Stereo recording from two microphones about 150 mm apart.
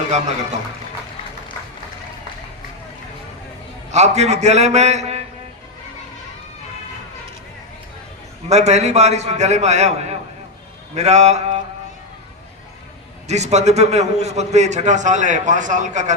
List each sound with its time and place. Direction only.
3.9 s a man's voice: 50° right (ahead or behind)
8.4 s a man's voice: 50° right (ahead or behind)
13.2 s a man's voice: 50° right (ahead or behind)